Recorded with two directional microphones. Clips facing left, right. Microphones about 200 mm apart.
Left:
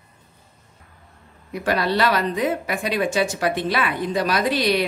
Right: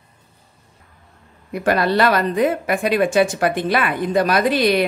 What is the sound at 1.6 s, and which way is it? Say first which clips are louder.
Speech: right 4 dB; 55° right (ahead or behind).